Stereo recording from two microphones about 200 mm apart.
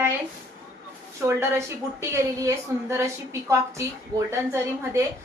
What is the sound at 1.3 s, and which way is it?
A woman's voice, 15° right (ahead or behind).